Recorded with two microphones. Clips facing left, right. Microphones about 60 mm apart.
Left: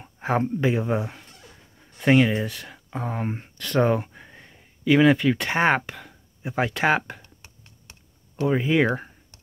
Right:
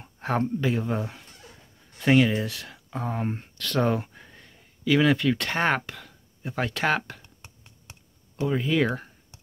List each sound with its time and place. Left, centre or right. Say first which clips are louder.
0.0 s a sound: left 2 dB; centre
0.7 s speech: left 3 dB; centre
4.8 s speech: left 4 dB; centre
8.5 s speech: left 3 dB; left